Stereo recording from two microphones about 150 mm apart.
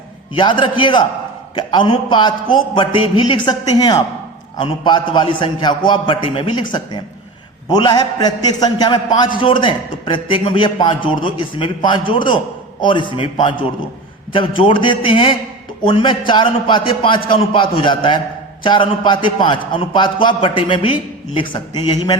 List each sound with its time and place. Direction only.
0.3 s a man's voice: 35° left (ahead or behind)